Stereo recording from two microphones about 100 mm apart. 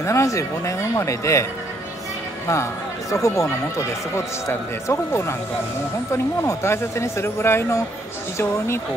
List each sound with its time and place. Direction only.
0.0 s speech: 30° left (ahead or behind)